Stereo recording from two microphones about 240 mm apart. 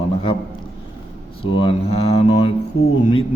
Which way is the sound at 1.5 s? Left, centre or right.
Left.